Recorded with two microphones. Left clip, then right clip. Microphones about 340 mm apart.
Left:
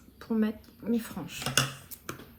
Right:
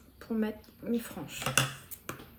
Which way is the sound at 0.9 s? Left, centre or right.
Centre.